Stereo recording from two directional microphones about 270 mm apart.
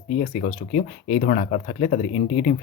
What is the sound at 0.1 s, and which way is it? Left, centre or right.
Speech, left.